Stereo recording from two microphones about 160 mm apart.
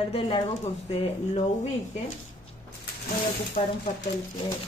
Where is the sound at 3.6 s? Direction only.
50° left (ahead or behind).